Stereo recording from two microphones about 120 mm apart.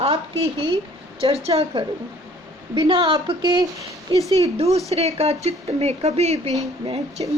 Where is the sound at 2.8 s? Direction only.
45° right (ahead or behind).